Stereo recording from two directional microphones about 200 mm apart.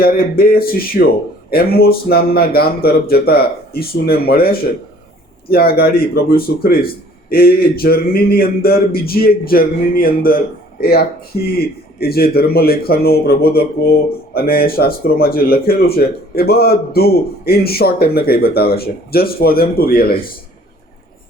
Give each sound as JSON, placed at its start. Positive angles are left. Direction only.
{"t": 0.0, "sound": "speech", "side_deg": 50}